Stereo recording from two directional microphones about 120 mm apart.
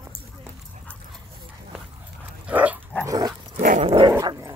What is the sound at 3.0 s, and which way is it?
Dog, 30° right (ahead or behind).